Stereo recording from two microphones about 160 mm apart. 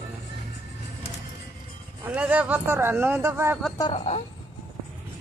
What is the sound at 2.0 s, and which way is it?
Speech, 10° right (ahead or behind).